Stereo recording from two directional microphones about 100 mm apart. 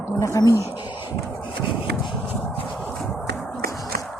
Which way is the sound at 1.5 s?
55° left (ahead or behind).